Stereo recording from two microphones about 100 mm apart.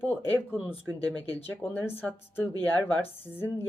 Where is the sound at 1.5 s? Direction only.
20° left (ahead or behind).